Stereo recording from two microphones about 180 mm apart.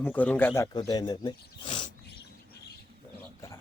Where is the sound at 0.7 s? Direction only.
20° left (ahead or behind).